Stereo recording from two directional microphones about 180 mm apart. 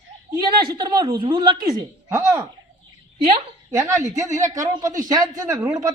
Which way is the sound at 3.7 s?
15° right (ahead or behind).